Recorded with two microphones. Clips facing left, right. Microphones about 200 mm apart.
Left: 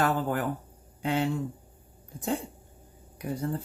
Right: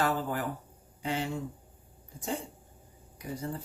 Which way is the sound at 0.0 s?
55° left (ahead or behind).